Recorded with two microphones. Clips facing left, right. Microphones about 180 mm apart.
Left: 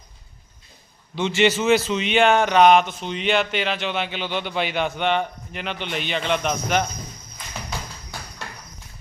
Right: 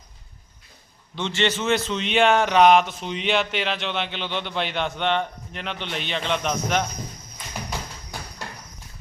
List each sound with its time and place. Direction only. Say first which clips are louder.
1.1 s a man's voice: left 5 dB; 10° left (ahead or behind)